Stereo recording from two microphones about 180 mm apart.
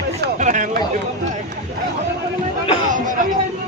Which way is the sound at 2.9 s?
45° right (ahead or behind).